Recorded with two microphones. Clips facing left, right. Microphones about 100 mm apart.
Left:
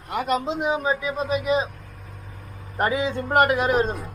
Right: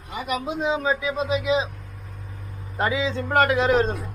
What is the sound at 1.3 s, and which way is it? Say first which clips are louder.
Speech: even; 50° left (ahead or behind).